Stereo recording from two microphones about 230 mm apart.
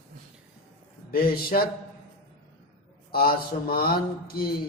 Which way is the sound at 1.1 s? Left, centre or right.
Left.